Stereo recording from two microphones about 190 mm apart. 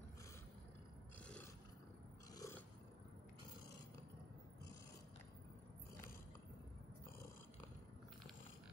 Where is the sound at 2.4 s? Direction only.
15° left (ahead or behind).